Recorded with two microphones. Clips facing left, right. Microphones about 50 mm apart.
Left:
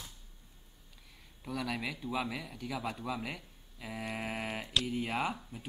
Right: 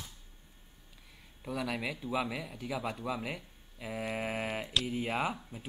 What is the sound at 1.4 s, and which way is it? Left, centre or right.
Speech, centre.